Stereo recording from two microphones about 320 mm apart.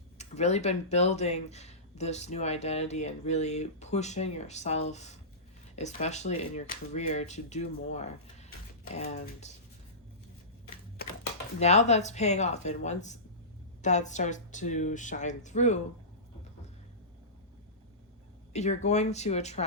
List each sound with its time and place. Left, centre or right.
0.2 s speech: left
11.6 s speech: left
18.5 s speech: left